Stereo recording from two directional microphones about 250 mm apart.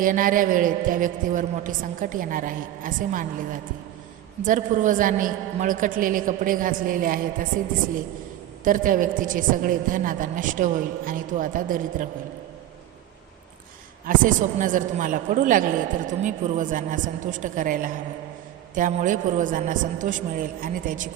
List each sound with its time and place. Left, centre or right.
0.0 s a woman's voice: right
8.6 s a woman's voice: right
14.1 s a woman's voice: right